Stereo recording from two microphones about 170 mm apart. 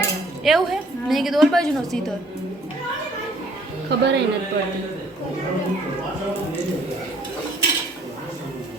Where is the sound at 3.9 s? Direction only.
80° right.